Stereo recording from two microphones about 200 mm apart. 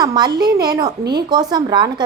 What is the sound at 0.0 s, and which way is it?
A woman's voice, 20° right (ahead or behind).